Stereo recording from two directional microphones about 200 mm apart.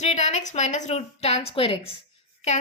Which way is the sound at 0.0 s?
35° left (ahead or behind).